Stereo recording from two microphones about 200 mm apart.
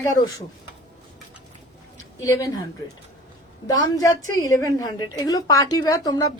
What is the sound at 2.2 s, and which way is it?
Speech, 15° left (ahead or behind).